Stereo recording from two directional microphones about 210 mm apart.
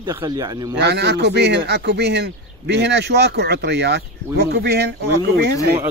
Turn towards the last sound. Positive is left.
turn(degrees=-50)  # may be behind; listen again after turning